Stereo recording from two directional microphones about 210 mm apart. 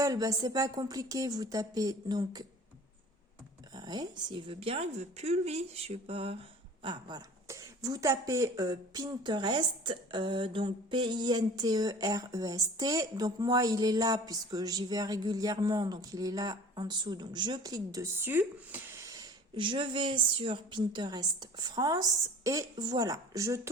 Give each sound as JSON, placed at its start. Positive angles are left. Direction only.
{"t": 0.0, "sound": "speech", "side_deg": -15}
{"t": 3.8, "sound": "speech", "side_deg": -20}